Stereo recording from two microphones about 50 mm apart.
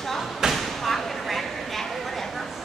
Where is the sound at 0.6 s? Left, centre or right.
Centre.